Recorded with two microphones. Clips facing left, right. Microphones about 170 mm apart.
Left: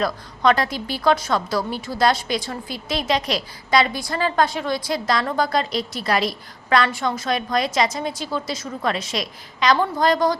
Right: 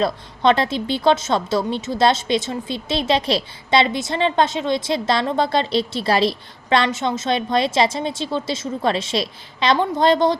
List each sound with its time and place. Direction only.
0.0 s a woman's voice: 25° right (ahead or behind)